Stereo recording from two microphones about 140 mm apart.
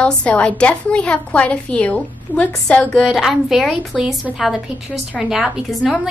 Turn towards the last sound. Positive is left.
turn(degrees=-5)  # may be behind; listen again after turning